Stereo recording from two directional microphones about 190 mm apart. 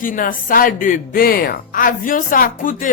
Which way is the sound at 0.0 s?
45° left (ahead or behind).